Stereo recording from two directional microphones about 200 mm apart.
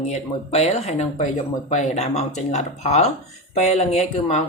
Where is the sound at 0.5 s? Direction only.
30° left (ahead or behind).